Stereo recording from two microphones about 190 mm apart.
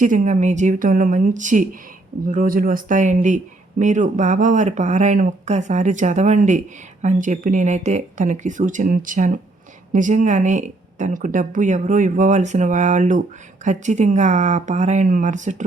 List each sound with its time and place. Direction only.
0.0 s speech: 40° right (ahead or behind)